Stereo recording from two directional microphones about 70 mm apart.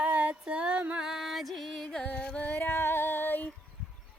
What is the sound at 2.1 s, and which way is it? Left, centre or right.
Music, left.